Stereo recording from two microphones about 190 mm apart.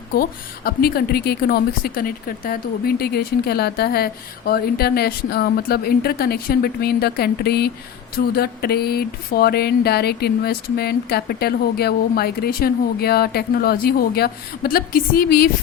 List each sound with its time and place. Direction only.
0.1 s a woman's voice: 50° left (ahead or behind)